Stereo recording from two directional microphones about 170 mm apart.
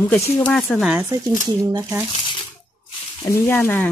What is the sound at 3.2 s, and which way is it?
Speech, 15° left (ahead or behind).